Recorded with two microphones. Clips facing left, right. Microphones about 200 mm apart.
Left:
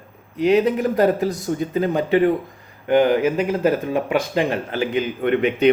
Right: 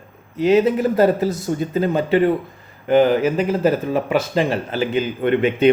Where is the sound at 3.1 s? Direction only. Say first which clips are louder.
Right 1 dB; 10° left (ahead or behind).